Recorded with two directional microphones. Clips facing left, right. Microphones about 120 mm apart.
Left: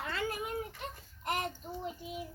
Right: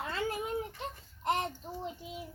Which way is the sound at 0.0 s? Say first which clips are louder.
Right 1 dB; 25° right (ahead or behind).